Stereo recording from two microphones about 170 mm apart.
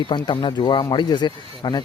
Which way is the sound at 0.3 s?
30° left (ahead or behind).